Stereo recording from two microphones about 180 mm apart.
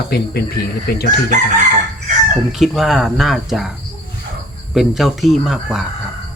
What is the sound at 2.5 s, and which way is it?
Speech, centre (ahead or behind).